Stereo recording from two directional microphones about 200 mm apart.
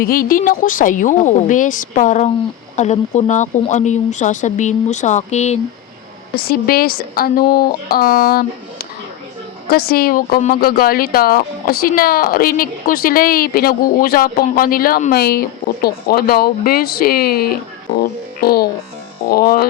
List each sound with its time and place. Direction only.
0.0 s speech: 45° left (ahead or behind)
6.3 s a woman's voice: 50° left (ahead or behind)